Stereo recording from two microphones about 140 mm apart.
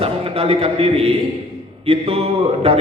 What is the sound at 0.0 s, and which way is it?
A man's voice, 45° right (ahead or behind).